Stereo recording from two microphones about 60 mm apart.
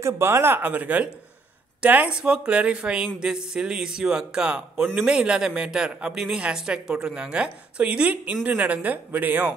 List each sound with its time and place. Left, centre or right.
0.0 s speech: right
2.0 s speech: centre